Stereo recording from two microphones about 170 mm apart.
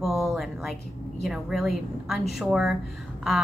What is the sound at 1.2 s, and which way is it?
A woman's voice, centre (ahead or behind).